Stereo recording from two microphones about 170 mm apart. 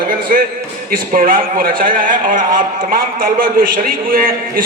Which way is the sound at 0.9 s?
55° right (ahead or behind).